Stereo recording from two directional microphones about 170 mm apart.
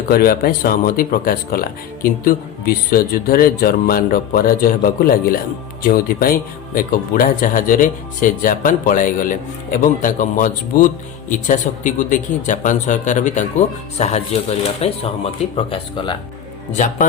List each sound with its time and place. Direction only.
0.1 s a man's voice: 60° left (ahead or behind); by 16.1 s 30° left (ahead or behind)
16.7 s speech: 45° left (ahead or behind)